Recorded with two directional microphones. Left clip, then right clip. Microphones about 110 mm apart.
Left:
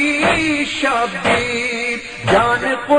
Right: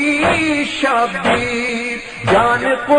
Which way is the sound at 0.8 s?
40° right (ahead or behind).